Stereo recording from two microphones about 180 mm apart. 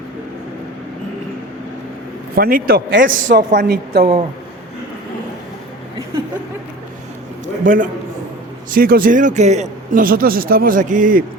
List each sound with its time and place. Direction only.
2.3 s a man's voice: 55° right (ahead or behind)
7.6 s a man's voice: 45° right (ahead or behind)